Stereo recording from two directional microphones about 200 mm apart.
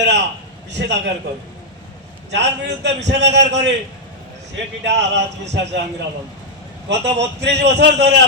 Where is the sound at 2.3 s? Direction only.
60° right (ahead or behind).